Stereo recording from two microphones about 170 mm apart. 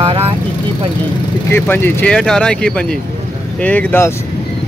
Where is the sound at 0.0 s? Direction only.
35° right (ahead or behind).